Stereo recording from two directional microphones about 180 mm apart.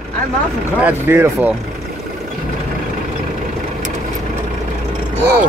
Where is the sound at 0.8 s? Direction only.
10° right (ahead or behind).